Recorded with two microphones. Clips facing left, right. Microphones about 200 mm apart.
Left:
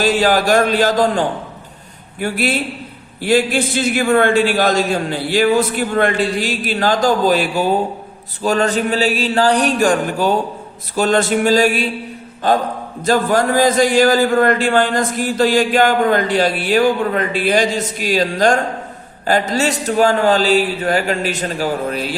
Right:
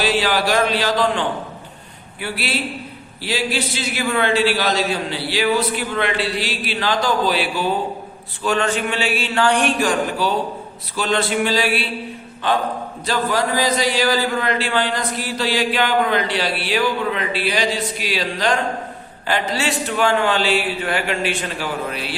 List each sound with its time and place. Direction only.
0.0 s a man's voice: 45° left (ahead or behind)